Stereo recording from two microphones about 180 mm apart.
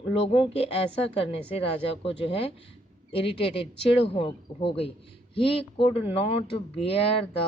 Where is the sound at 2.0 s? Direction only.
30° left (ahead or behind).